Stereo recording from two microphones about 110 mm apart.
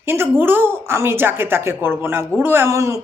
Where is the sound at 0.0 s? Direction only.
20° right (ahead or behind).